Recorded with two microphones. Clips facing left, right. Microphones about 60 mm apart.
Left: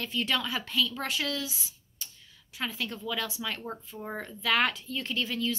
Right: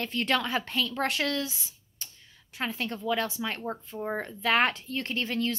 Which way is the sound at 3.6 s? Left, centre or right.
Right.